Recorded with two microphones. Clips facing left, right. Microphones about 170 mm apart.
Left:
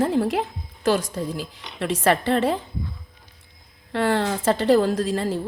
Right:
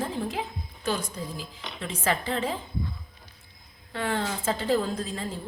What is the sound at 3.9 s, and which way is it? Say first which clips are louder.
A woman's voice: left 7 dB; 75° left (ahead or behind).